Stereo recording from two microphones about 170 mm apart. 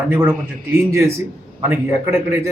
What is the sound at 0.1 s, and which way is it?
A man's voice, 15° right (ahead or behind).